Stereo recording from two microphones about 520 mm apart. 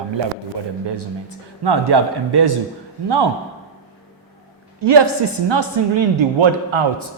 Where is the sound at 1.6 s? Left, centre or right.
Right.